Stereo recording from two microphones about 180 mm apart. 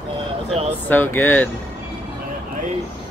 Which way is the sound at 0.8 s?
10° left (ahead or behind).